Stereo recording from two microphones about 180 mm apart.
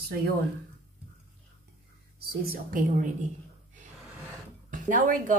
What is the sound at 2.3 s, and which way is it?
A woman's voice, 55° right (ahead or behind).